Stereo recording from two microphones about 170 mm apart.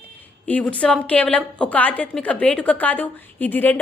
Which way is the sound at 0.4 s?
10° left (ahead or behind).